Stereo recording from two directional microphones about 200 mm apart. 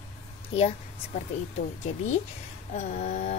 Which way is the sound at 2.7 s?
35° left (ahead or behind).